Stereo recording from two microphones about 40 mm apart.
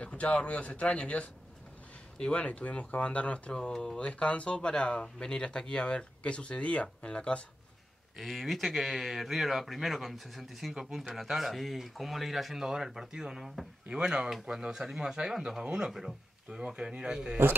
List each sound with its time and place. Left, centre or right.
0.0 s speech: left
3.5 s speech: centre
4.0 s speech: left
8.2 s speech: centre; by 14.3 s right
14.3 s speech: centre
15.9 s speech: centre
16.5 s speech: centre